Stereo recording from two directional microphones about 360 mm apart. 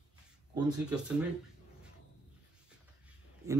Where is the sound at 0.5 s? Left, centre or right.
Centre.